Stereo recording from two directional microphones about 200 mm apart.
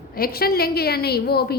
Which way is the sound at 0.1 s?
50° left (ahead or behind).